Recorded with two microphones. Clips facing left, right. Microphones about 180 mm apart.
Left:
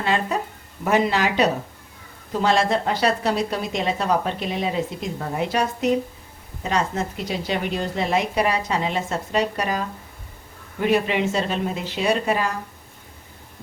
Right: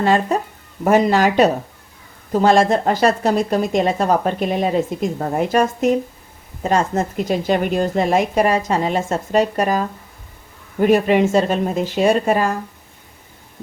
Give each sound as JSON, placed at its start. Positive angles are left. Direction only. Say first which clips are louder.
{"t": 0.0, "sound": "speech", "louder": "right 6 dB", "side_deg": -45}